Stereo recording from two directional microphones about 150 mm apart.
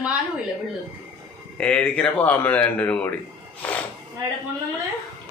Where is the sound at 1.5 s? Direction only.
10° left (ahead or behind).